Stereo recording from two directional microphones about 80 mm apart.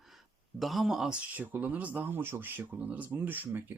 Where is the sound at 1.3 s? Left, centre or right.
Right.